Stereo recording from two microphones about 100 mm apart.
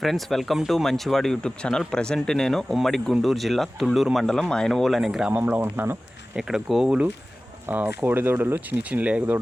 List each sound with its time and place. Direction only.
0.0 s speech: centre (ahead or behind)
5.3 s speech: 15° right (ahead or behind)
6.3 s speech: 5° right (ahead or behind)
7.7 s speech: 20° right (ahead or behind)